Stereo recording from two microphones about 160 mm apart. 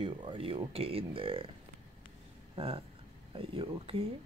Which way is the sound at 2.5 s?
35° right (ahead or behind).